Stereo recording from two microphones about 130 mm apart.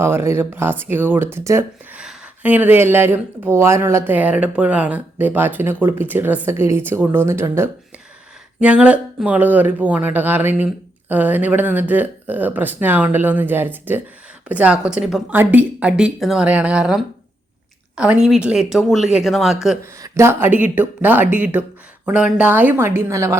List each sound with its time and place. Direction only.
0.0 s speech: 20° right (ahead or behind)
2.0 s speech: 10° right (ahead or behind)
19.8 s speech: 20° right (ahead or behind)